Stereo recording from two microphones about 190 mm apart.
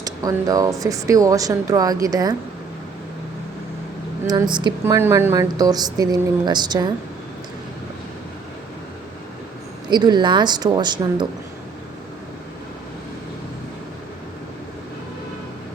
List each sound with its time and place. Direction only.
0.0 s speech: 20° right (ahead or behind)
4.3 s speech: 20° right (ahead or behind)
4.9 s speech: 10° right (ahead or behind)
9.9 s speech: 20° right (ahead or behind)